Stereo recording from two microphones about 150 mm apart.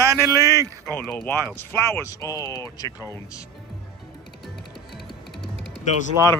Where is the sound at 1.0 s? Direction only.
10° left (ahead or behind).